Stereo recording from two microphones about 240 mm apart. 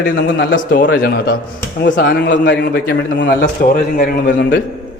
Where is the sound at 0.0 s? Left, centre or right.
Left.